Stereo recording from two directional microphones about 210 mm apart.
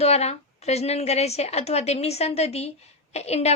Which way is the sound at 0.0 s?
30° left (ahead or behind).